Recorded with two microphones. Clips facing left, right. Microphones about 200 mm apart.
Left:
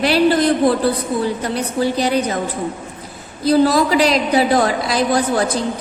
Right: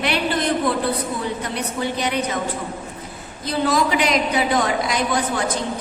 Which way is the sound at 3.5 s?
35° left (ahead or behind).